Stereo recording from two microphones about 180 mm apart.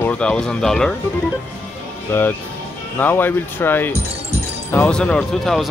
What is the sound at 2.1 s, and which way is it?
Speech, 10° left (ahead or behind).